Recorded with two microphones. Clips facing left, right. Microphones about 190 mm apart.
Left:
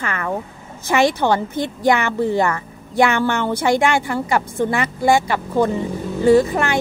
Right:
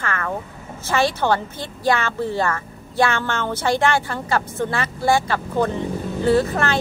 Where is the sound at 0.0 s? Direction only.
15° left (ahead or behind).